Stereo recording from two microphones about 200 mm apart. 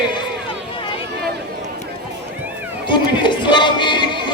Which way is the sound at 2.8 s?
25° left (ahead or behind).